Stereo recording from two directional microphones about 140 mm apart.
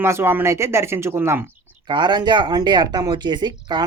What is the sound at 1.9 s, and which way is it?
Speech, 35° right (ahead or behind).